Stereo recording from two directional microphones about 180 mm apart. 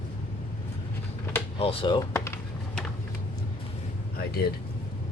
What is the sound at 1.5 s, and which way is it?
Speech, 30° left (ahead or behind).